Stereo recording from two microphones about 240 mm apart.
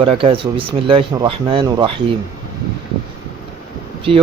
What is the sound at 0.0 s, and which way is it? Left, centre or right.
Speech, right.